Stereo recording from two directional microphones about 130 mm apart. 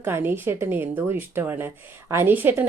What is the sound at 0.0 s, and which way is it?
Speech, 15° right (ahead or behind).